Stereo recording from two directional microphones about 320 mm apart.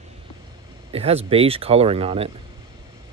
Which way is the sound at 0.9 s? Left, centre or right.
Centre.